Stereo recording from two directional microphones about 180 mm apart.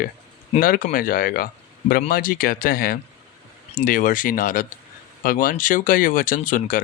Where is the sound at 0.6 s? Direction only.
50° left (ahead or behind).